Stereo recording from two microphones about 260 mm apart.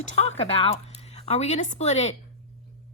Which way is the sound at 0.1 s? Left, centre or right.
Left.